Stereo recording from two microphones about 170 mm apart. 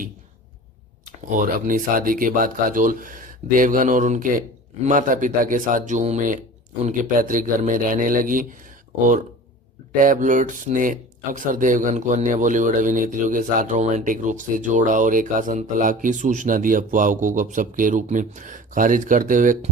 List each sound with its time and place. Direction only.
1.3 s speech: 50° right (ahead or behind)
9.9 s speech: 50° right (ahead or behind)